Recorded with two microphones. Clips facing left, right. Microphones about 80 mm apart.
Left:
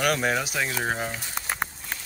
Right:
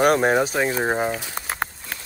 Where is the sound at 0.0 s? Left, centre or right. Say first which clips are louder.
Right 7 dB; right.